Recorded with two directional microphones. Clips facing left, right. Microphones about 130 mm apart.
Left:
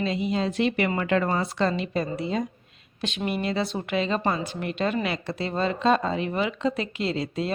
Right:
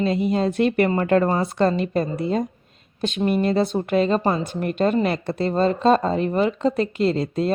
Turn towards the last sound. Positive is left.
turn(degrees=-45)  # may be behind; listen again after turning